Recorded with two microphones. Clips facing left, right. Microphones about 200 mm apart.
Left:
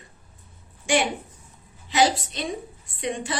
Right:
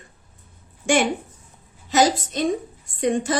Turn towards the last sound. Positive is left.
turn(degrees=-45)  # may be behind; listen again after turning